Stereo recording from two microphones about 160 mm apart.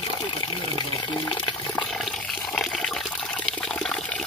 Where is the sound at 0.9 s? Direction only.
30° left (ahead or behind).